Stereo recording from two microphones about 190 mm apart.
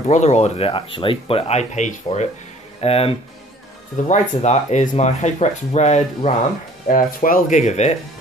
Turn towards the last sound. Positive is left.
turn(degrees=35)  # may be behind; listen again after turning